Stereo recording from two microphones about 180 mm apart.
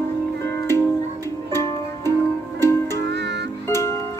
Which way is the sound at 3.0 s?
70° right (ahead or behind).